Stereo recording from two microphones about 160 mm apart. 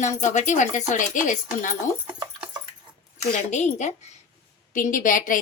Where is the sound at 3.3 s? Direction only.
45° left (ahead or behind).